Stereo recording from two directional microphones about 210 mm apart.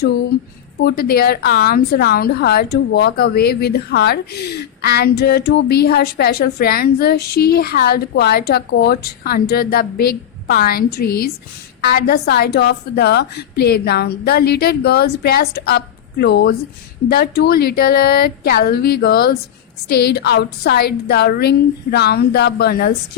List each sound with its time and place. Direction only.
0.8 s a woman's voice: 50° left (ahead or behind)